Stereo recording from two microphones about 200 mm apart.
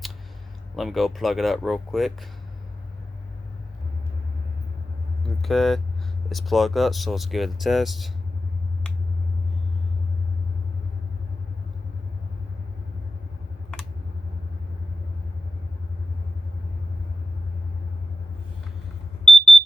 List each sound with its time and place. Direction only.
0.8 s speech: centre (ahead or behind)
5.4 s speech: centre (ahead or behind)
19.2 s alarm: centre (ahead or behind)